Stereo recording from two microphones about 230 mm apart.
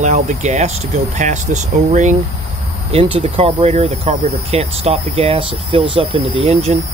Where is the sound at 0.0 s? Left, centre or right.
Right.